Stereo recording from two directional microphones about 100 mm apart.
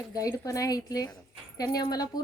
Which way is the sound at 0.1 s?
35° left (ahead or behind).